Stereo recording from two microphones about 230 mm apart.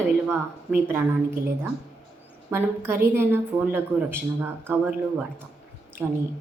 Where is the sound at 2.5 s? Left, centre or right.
Centre.